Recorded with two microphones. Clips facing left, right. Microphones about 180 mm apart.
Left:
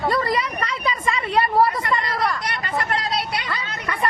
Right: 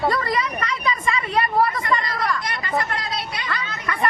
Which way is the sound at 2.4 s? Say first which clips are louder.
Right 1 dB; 65° left (ahead or behind).